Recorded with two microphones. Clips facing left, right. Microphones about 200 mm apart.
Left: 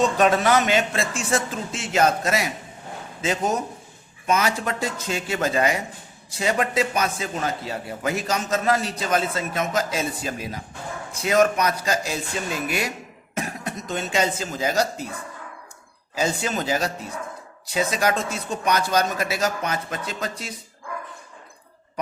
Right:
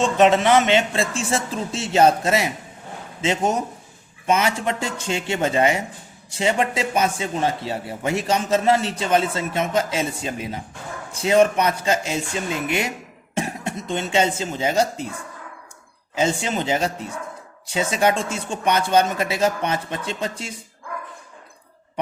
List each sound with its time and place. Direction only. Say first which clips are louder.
0.0 s a man's voice: right 2 dB; 25° right (ahead or behind)
13.3 s cough: right 3 dB; 25° right (ahead or behind)
14.3 s a man's voice: right 2 dB; 25° right (ahead or behind)
16.1 s a man's voice: right 3 dB; 25° right (ahead or behind)